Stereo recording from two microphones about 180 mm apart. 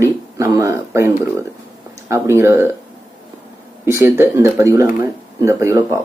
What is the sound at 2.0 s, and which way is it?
Speech, 15° right (ahead or behind).